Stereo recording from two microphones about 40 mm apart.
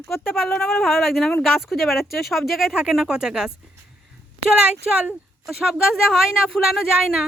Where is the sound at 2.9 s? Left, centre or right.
Centre.